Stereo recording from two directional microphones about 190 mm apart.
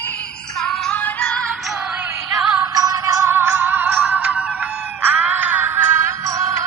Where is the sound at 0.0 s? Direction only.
10° left (ahead or behind).